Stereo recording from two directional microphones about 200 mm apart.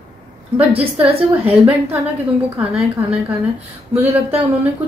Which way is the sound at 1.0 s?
30° right (ahead or behind).